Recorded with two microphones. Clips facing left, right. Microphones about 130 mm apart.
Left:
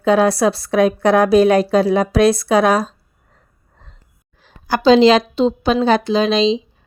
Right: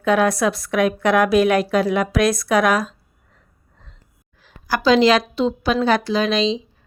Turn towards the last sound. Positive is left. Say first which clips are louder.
# left 4 dB
turn(degrees=25)  # may be behind; listen again after turning